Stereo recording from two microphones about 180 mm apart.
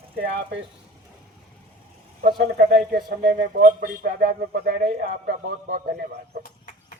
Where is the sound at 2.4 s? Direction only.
60° right (ahead or behind).